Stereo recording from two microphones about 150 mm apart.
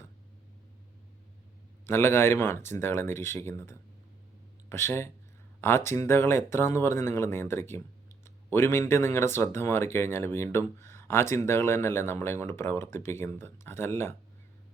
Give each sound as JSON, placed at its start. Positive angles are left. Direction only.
{"t": 1.9, "sound": "speech", "side_deg": 15}